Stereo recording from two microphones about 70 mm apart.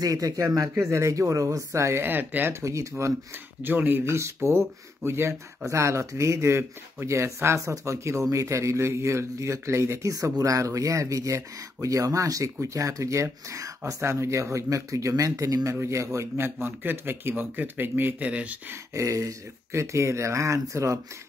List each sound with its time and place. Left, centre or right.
0.0 s speech: right
0.7 s speech: right
2.0 s speech: right
2.6 s speech: right
3.6 s speech: right
4.0 s speech: right; by 18.6 s centre
18.9 s speech: right